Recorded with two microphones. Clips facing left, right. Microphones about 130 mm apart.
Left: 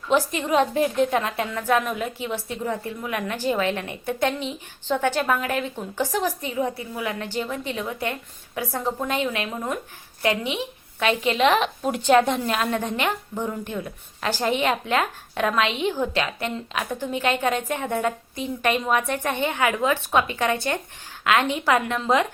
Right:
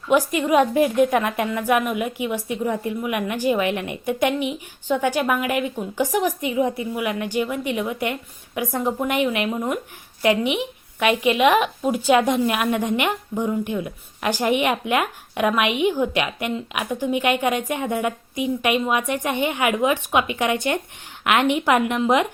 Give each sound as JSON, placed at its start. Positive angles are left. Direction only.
{"t": 0.1, "sound": "a woman's voice", "side_deg": -15}